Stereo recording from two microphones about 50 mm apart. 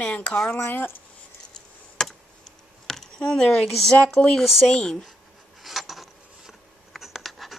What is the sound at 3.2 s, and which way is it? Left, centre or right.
Speech, centre.